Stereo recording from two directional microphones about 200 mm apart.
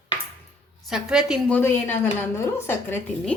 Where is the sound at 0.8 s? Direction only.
5° right (ahead or behind).